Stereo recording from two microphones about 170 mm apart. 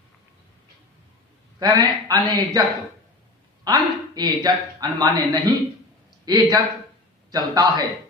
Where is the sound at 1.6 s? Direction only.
25° right (ahead or behind).